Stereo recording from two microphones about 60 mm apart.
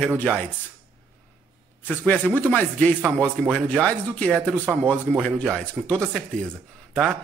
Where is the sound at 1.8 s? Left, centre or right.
Left.